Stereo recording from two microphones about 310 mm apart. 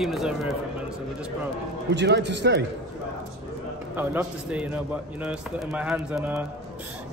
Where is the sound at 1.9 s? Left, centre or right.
Right.